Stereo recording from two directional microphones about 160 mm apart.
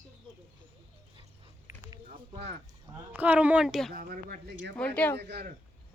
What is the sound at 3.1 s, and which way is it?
Speech, 10° right (ahead or behind).